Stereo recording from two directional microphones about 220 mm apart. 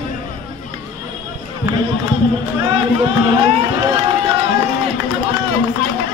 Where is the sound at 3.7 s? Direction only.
20° right (ahead or behind).